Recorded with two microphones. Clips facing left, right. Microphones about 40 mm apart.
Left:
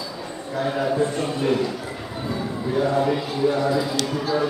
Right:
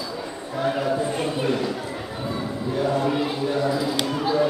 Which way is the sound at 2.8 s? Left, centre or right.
Centre.